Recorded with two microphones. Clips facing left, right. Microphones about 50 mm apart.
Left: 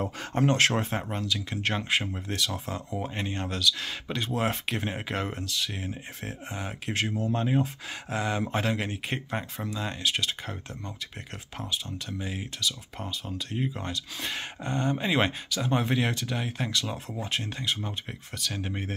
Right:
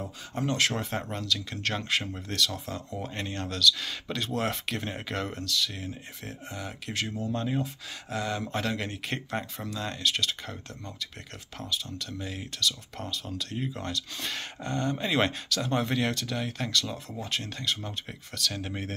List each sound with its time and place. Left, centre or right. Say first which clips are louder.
0.3 s speech: left 4 dB; left
0.9 s speech: left 1 dB; centre